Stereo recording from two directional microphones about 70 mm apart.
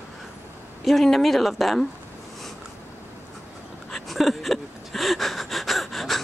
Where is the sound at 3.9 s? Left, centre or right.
Centre.